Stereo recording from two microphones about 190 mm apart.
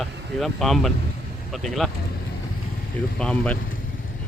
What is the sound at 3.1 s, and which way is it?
Speech, 5° left (ahead or behind).